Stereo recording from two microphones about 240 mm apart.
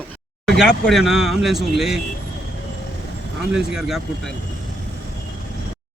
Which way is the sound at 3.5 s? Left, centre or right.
Centre.